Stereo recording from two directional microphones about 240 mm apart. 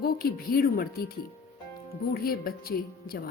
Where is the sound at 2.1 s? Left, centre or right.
Left.